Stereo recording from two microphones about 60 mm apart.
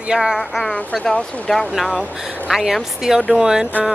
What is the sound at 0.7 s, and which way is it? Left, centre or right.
Speech, centre.